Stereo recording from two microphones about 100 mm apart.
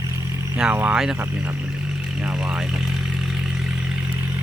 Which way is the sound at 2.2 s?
10° right (ahead or behind).